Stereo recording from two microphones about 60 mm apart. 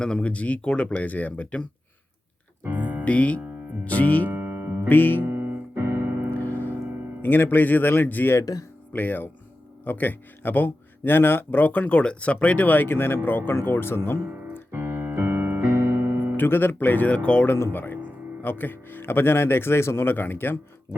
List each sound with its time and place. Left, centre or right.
0.0 s speech: centre
2.6 s piano: right
3.0 s speech: left
4.3 s music: right
4.9 s speech: left
5.2 s keyboard: right
6.3 s piano: left
7.2 s speech: left
14.7 s keyboard: right
16.4 s speech: left
17.4 s speech: left